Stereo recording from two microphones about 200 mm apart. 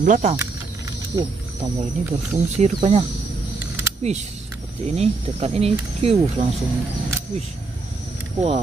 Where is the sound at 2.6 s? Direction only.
35° right (ahead or behind).